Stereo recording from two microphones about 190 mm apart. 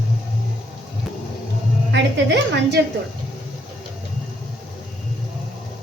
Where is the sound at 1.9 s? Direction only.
65° right (ahead or behind).